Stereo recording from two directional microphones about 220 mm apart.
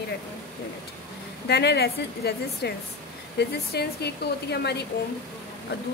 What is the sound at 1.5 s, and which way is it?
A woman's voice, 50° left (ahead or behind).